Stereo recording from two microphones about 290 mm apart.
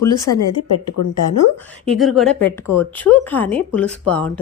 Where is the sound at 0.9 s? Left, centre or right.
Left.